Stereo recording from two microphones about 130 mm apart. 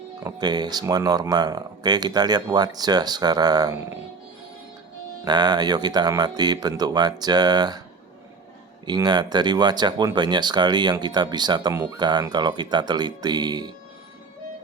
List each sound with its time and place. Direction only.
0.3 s speech: 35° right (ahead or behind)
5.2 s speech: 35° right (ahead or behind)
9.0 s speech: 35° right (ahead or behind)